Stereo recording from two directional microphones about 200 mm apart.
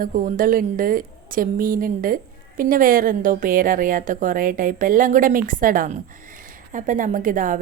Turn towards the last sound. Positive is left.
turn(degrees=-40)  # may be behind; listen again after turning